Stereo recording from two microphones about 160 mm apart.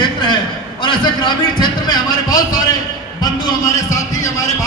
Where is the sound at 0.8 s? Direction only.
30° left (ahead or behind).